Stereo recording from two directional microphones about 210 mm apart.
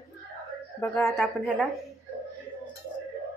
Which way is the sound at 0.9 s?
Centre (ahead or behind).